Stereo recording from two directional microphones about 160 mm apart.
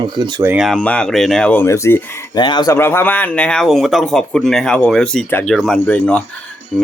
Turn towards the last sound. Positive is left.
turn(degrees=5)  # may be behind; listen again after turning